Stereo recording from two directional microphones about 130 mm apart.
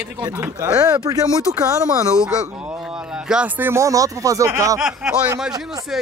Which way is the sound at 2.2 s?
5° right (ahead or behind).